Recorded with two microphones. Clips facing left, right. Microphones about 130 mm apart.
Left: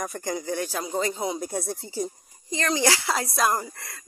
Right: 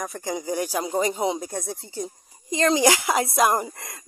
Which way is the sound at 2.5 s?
20° right (ahead or behind).